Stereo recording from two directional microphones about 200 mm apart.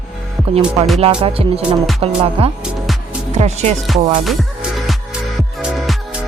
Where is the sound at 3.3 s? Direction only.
35° right (ahead or behind).